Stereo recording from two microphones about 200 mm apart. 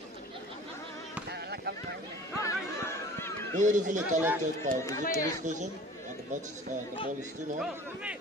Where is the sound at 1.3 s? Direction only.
55° right (ahead or behind).